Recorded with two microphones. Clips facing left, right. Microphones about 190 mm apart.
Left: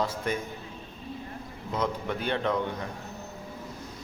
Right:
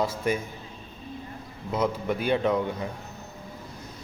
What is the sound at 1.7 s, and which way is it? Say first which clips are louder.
Speech: right 4 dB; 10° right (ahead or behind).